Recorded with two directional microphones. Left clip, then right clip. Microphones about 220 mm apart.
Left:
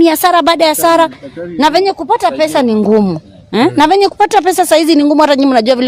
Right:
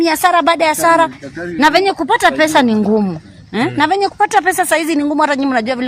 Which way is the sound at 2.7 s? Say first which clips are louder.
Left 5 dB; 40° left (ahead or behind).